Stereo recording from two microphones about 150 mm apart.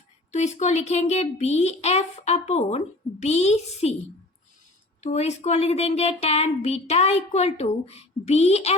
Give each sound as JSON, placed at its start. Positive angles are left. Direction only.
{"t": 0.3, "sound": "a woman's voice", "side_deg": 50}
{"t": 4.9, "sound": "a woman's voice", "side_deg": 50}